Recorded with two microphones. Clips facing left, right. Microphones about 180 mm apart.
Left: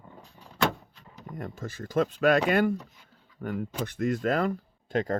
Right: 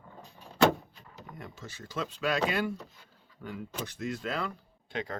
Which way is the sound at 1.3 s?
50° left (ahead or behind).